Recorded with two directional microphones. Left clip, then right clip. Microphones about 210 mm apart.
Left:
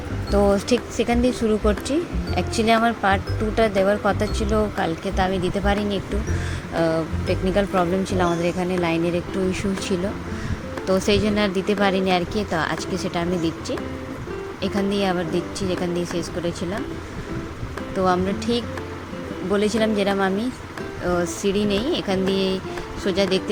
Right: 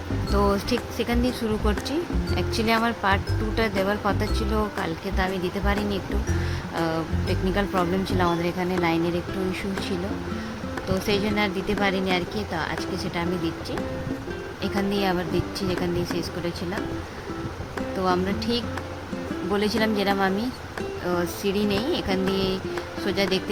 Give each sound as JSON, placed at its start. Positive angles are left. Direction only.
{"t": 0.4, "sound": "speech", "side_deg": 20}
{"t": 10.8, "sound": "speech", "side_deg": 20}
{"t": 18.0, "sound": "speech", "side_deg": 15}